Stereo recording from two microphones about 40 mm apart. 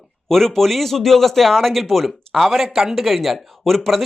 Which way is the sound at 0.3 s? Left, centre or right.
Centre.